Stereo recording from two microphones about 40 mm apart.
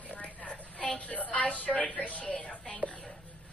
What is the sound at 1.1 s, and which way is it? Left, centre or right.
A man's voice, left.